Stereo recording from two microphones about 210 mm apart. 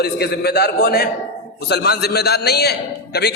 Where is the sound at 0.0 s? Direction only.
50° left (ahead or behind).